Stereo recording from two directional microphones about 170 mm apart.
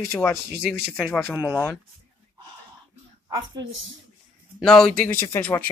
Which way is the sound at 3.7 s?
90° right.